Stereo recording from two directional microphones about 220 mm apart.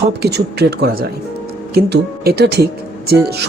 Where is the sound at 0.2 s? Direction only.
50° right (ahead or behind).